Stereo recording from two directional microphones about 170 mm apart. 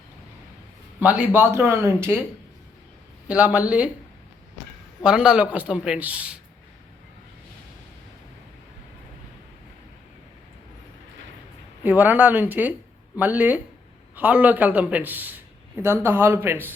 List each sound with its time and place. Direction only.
0.9 s a man's voice: 10° right (ahead or behind)
3.2 s a man's voice: 10° right (ahead or behind)
5.0 s a man's voice: 5° right (ahead or behind)
11.8 s a man's voice: 10° right (ahead or behind)